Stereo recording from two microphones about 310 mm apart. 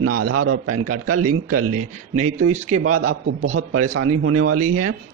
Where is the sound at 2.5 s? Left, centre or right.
Right.